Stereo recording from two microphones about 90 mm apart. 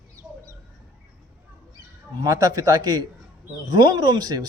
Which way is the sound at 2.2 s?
45° right (ahead or behind).